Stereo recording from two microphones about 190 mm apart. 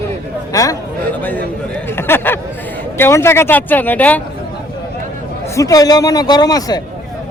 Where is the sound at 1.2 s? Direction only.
10° left (ahead or behind).